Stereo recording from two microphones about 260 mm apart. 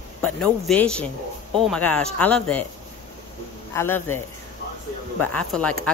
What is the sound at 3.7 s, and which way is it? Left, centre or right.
Speech, centre.